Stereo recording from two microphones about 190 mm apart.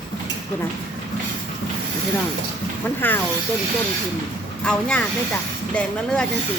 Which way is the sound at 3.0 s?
10° left (ahead or behind).